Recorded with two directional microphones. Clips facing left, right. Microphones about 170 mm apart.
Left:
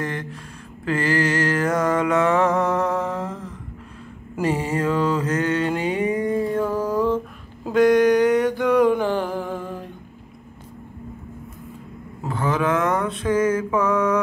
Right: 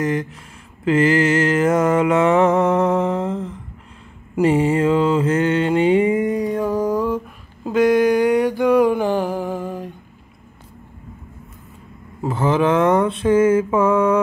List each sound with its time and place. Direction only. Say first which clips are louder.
0.0 s mantra: right 7 dB; 20° right (ahead or behind)
7.6 s mantra: right 1 dB; 5° right (ahead or behind)
12.3 s mantra: right 5 dB; 25° right (ahead or behind)